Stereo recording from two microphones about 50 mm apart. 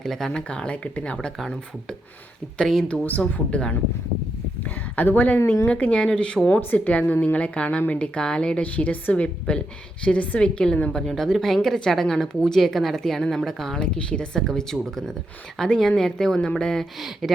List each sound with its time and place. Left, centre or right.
0.0 s speech: centre
0.3 s a woman's voice: centre
2.8 s a woman's voice: left
4.6 s a sound: left
5.6 s a woman's voice: left
6.4 s a woman's voice: left
8.0 s a woman's voice: centre
17.0 s speech: centre